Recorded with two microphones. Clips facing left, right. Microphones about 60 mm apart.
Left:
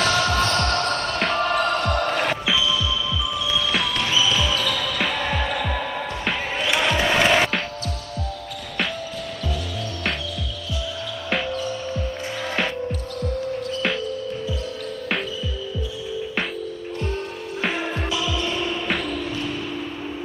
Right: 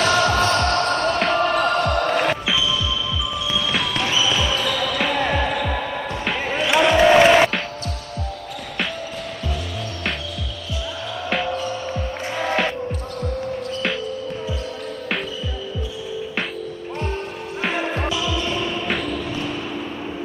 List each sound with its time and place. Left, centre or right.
0.0 s music: centre
1.2 s basketball bounce: centre
6.6 s music: centre
11.5 s music: right
18.2 s basketball bounce: centre